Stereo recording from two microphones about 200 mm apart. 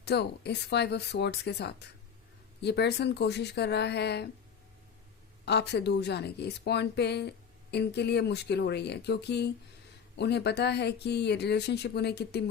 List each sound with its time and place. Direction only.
0.0 s speech: 55° left (ahead or behind)
5.5 s speech: 55° left (ahead or behind)